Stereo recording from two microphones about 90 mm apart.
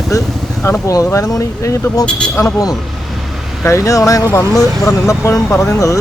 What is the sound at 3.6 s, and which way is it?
Speech, 35° left (ahead or behind).